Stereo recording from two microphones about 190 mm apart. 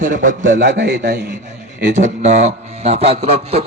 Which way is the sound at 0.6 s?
70° right (ahead or behind).